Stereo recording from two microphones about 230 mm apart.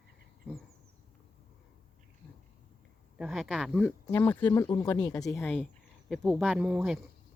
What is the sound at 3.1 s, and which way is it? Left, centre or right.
Speech, centre.